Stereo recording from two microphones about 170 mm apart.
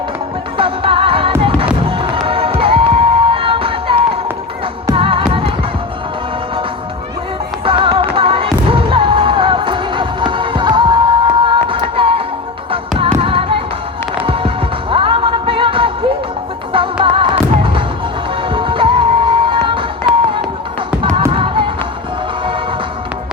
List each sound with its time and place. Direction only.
0.5 s music: 30° right (ahead or behind)
7.6 s music: 30° right (ahead or behind)
13.2 s music: 30° right (ahead or behind)
21.2 s a sound: 30° right (ahead or behind)